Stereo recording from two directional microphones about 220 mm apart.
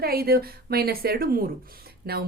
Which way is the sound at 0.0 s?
45° right (ahead or behind).